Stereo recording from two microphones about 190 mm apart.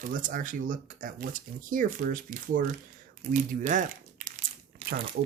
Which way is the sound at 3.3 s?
40° right (ahead or behind).